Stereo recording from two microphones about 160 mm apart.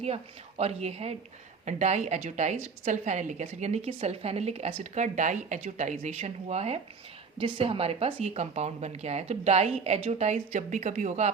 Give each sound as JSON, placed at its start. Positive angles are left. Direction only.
{"t": 0.0, "sound": "a woman's voice", "side_deg": -40}